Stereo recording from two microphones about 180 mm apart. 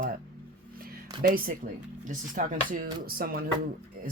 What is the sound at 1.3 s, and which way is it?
Speech, 55° right (ahead or behind).